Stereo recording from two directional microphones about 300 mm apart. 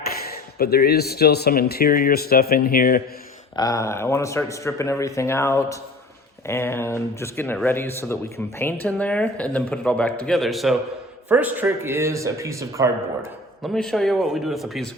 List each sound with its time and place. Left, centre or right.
0.6 s speech: left
3.5 s a man's voice: centre
13.6 s speech: centre